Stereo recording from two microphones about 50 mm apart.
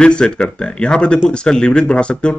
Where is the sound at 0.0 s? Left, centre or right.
Centre.